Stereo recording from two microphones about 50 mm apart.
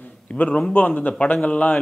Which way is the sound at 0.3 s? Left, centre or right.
Left.